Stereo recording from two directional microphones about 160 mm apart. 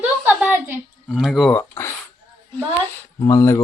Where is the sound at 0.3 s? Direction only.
10° right (ahead or behind).